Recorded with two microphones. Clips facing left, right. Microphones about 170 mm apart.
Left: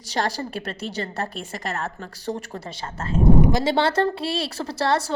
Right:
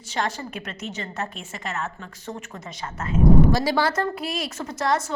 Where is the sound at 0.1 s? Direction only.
35° left (ahead or behind).